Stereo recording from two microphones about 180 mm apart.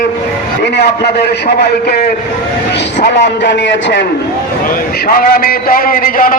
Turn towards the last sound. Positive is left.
turn(degrees=50)  # may be behind; listen again after turning